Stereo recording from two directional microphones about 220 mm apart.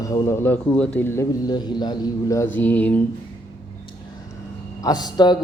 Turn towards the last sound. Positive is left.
turn(degrees=20)  # may be behind; listen again after turning